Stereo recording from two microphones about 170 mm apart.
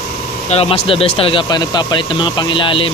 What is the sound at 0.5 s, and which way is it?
Speech, 35° left (ahead or behind).